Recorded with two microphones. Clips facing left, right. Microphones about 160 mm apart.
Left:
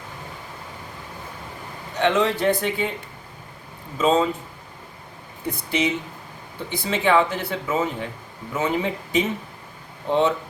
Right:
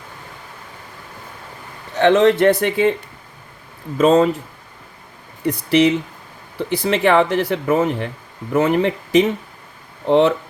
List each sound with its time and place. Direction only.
2.0 s speech: 80° right
3.9 s speech: 70° right (ahead or behind)
5.5 s speech: 85° right